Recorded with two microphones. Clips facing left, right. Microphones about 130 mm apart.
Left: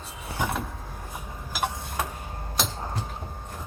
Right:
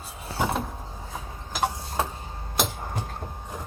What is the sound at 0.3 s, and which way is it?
Vehicle, 20° right (ahead or behind).